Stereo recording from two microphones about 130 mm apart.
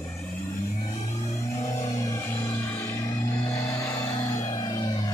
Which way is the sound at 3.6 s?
25° left (ahead or behind).